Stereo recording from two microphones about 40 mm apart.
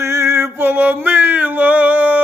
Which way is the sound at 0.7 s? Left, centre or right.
Right.